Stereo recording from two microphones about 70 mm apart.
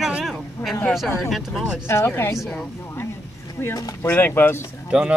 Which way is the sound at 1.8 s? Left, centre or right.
Left.